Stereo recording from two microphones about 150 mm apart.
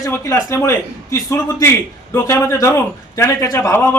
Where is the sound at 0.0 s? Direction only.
20° left (ahead or behind).